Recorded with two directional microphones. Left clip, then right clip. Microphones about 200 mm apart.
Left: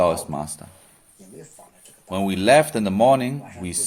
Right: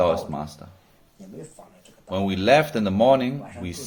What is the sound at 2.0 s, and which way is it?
Speech, 25° left (ahead or behind).